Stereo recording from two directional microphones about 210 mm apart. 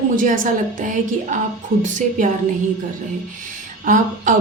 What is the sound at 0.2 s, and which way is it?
A woman's voice, 40° right (ahead or behind).